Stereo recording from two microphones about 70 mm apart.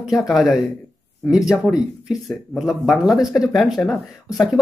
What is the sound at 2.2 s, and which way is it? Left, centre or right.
Speech, centre.